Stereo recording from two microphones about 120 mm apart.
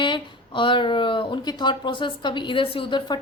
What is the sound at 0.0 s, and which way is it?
Speech, 40° left (ahead or behind).